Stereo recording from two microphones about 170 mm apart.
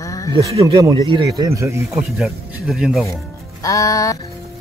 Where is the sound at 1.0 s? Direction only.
25° right (ahead or behind).